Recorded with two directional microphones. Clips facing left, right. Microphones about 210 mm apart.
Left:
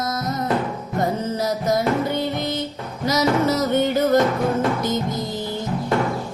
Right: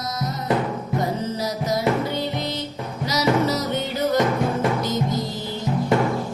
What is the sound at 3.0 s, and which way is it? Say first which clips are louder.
Music: left 2 dB; 50° left (ahead or behind).